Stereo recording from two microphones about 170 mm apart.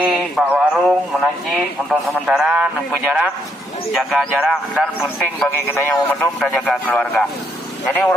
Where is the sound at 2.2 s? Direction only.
5° right (ahead or behind).